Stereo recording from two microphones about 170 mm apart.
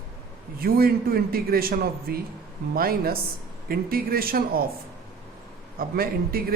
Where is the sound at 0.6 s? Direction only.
60° right (ahead or behind).